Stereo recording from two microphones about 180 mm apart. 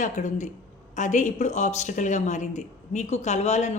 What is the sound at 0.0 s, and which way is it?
A woman's voice, 40° left (ahead or behind).